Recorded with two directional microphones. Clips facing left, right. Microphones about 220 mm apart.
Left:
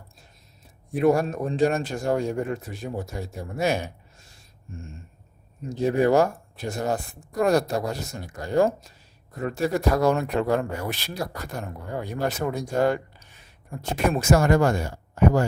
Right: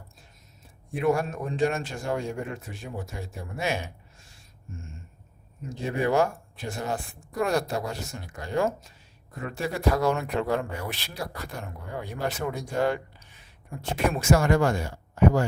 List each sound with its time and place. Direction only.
0.9 s speech: 40° left (ahead or behind)
5.6 s speech: 40° left (ahead or behind)